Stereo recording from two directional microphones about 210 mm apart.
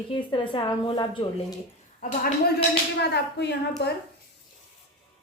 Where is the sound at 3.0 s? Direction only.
55° left (ahead or behind).